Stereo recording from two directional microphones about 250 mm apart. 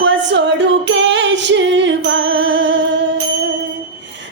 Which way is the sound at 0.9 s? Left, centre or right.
Right.